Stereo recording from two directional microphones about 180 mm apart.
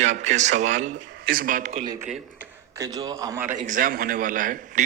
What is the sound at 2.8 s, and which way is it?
Speech, 20° right (ahead or behind).